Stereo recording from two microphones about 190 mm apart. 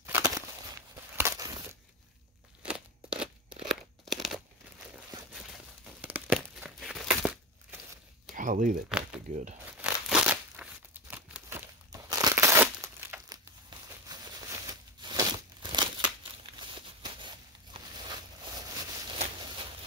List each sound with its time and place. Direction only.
0.0 s a sound: 15° right (ahead or behind)
2.6 s scissors: 5° right (ahead or behind)
4.0 s a sound: centre (ahead or behind)
5.3 s tearing: 5° right (ahead or behind)
8.4 s speech: 45° right (ahead or behind)
8.8 s crumpling: 5° right (ahead or behind)
9.3 s speech: 40° right (ahead or behind)
9.7 s crumpling: 5° right (ahead or behind)
14.1 s a sound: 20° right (ahead or behind)